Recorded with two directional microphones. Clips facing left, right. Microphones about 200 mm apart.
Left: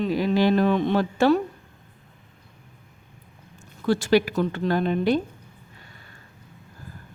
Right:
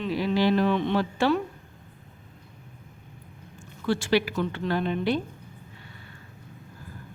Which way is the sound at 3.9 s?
40° left (ahead or behind).